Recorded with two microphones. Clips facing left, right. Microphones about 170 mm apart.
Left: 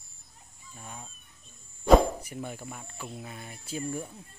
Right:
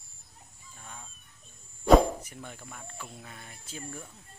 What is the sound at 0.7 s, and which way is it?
Speech, 15° left (ahead or behind).